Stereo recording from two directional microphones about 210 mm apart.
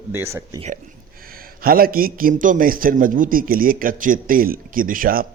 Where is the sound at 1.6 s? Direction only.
45° right (ahead or behind).